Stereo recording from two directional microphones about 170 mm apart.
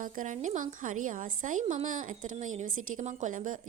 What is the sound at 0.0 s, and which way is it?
A woman's voice, 50° right (ahead or behind).